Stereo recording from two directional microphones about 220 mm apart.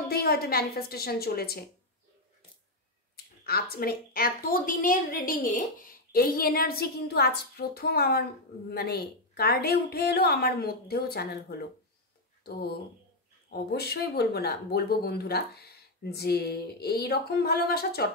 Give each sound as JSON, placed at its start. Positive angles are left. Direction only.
{"t": 0.1, "sound": "a woman's voice", "side_deg": 45}
{"t": 3.4, "sound": "a woman's voice", "side_deg": 45}